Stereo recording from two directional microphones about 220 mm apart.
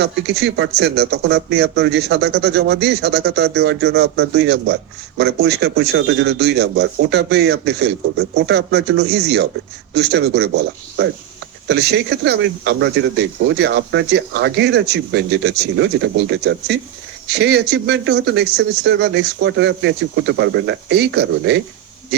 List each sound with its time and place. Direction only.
0.0 s speech: 50° right (ahead or behind)